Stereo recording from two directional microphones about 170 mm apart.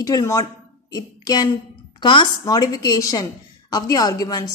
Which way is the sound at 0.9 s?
25° left (ahead or behind).